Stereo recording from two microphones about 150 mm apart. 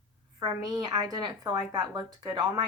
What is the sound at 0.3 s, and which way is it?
Speech, 25° right (ahead or behind).